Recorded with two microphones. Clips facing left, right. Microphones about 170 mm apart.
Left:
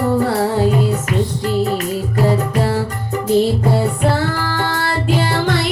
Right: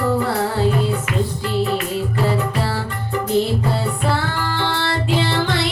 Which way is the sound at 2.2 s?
40° left (ahead or behind).